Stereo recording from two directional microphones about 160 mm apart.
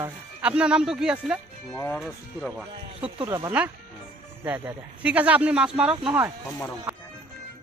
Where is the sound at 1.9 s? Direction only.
Centre (ahead or behind).